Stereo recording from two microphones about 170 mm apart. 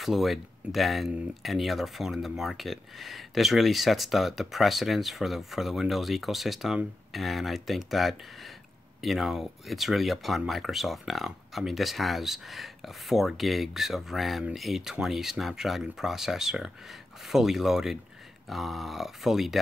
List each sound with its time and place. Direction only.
0.0 s speech: centre (ahead or behind)